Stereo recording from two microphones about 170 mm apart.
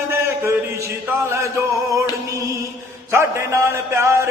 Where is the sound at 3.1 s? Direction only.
15° right (ahead or behind).